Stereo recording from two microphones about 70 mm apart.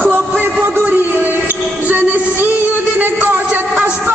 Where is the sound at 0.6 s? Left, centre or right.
Right.